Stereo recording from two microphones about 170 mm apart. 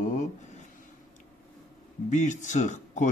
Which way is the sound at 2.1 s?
45° left (ahead or behind).